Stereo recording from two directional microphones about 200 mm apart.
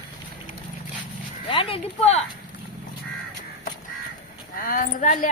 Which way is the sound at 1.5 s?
25° left (ahead or behind).